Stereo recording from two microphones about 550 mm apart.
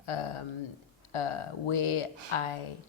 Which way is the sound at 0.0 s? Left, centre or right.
Left.